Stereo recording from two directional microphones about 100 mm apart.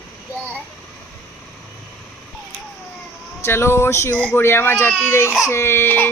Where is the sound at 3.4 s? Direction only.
25° left (ahead or behind).